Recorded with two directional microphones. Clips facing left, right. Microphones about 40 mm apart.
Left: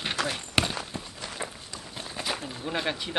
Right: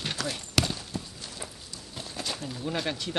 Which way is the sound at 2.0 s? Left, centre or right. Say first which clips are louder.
Left 2 dB; left.